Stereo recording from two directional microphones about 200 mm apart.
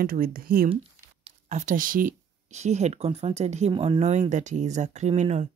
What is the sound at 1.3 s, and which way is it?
Speech, 35° right (ahead or behind).